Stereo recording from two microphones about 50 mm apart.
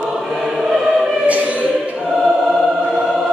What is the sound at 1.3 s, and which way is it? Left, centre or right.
Choir, right.